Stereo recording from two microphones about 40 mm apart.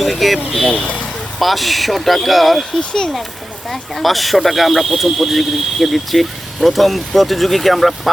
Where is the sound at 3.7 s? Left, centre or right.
Centre.